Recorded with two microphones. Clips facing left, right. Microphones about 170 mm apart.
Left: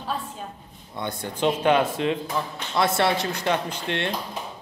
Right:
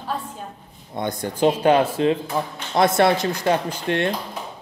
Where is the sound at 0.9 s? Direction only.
40° right (ahead or behind).